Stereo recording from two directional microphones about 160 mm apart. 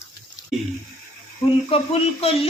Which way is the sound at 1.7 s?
35° left (ahead or behind).